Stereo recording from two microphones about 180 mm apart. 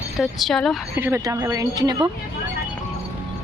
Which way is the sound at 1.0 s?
15° right (ahead or behind).